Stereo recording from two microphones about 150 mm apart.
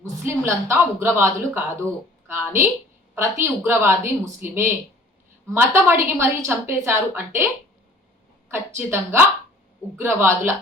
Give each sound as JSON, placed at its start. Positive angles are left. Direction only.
{"t": 0.3, "sound": "a woman's voice", "side_deg": -15}